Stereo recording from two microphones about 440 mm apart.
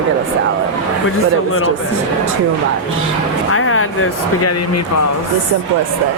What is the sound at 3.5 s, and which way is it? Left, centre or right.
Speech, left.